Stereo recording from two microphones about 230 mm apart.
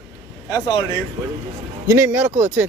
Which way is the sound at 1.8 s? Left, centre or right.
Centre.